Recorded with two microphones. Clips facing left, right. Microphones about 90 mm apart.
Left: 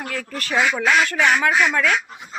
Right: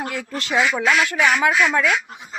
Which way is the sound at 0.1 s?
20° right (ahead or behind).